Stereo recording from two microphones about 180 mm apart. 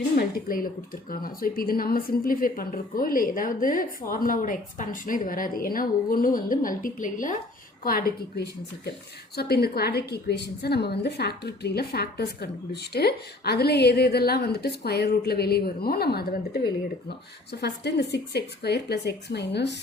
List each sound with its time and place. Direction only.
0.2 s a woman's voice: 55° left (ahead or behind)